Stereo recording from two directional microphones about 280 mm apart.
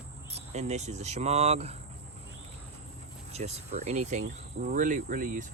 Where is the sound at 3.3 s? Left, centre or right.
Right.